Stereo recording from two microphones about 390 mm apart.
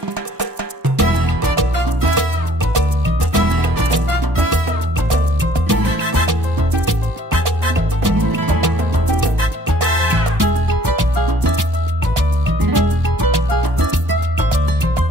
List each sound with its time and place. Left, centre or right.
0.9 s music: right
5.7 s music: right
8.0 s music: right
12.6 s music: right